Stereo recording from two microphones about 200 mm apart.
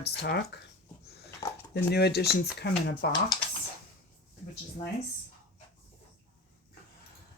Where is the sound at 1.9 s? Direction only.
55° left (ahead or behind).